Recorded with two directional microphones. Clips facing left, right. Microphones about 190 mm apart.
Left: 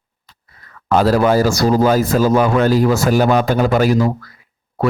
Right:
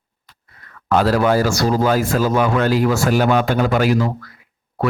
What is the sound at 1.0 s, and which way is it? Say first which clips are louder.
A man's voice: left 3 dB; 40° left (ahead or behind).